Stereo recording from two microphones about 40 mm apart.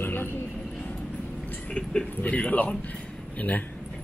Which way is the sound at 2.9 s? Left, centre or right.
Left.